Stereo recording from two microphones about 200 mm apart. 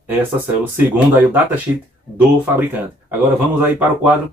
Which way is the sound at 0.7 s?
10° right (ahead or behind).